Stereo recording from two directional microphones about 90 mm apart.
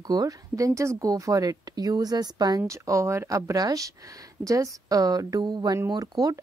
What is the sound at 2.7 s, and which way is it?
Speech, 35° right (ahead or behind).